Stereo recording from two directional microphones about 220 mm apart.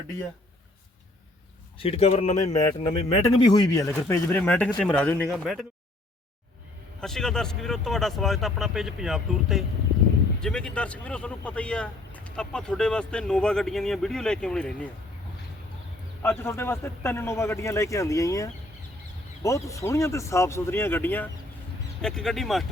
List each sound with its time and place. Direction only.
1.8 s a man's voice: 25° left (ahead or behind)
3.3 s speech: 20° left (ahead or behind); by 5.6 s centre (ahead or behind)
7.0 s speech: centre (ahead or behind)
16.4 s speech: 10° left (ahead or behind)